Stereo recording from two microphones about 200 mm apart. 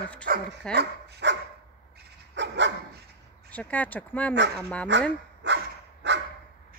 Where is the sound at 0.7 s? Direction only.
60° right (ahead or behind).